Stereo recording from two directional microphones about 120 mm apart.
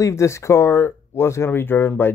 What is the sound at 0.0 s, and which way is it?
Speech, 25° left (ahead or behind).